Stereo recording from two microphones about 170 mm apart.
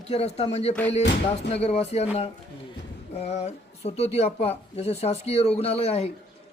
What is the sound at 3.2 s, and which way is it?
Speech, 40° left (ahead or behind).